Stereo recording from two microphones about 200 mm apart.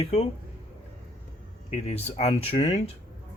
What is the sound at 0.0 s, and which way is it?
Speech, 30° left (ahead or behind).